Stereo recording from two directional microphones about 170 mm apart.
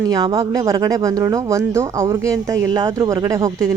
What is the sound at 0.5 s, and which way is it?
Speech, 15° right (ahead or behind).